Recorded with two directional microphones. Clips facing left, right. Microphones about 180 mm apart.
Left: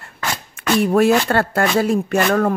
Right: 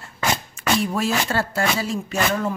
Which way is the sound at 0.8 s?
60° left (ahead or behind).